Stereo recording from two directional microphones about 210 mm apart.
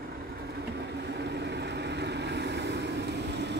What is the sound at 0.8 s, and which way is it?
Vehicle, 55° right (ahead or behind).